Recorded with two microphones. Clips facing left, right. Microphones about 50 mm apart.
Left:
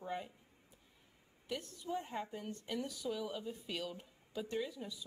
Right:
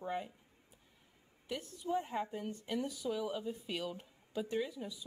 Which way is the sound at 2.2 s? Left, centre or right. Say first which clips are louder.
Right 3 dB; right.